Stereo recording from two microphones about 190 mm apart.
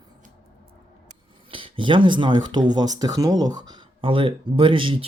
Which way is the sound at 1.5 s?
25° right (ahead or behind).